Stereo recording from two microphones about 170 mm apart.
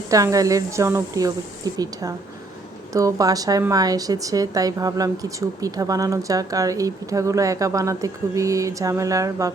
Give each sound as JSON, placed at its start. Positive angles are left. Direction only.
{"t": 0.1, "sound": "a woman's voice", "side_deg": -20}